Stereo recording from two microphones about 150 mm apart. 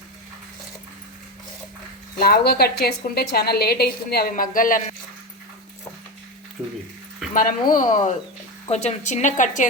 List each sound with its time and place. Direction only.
2.1 s a woman's voice: 90° left; by 4.8 s 65° left (ahead or behind)
7.3 s speech: 65° left (ahead or behind)
8.7 s a woman's voice: 45° left (ahead or behind)